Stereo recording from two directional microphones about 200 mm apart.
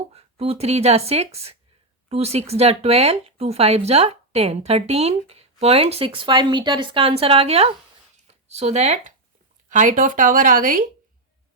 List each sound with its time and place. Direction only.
0.1 s speech: 30° right (ahead or behind)